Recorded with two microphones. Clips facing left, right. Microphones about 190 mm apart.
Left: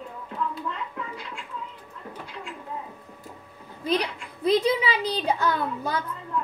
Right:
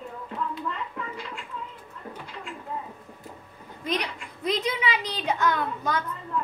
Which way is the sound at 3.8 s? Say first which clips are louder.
Left 4 dB; 30° left (ahead or behind).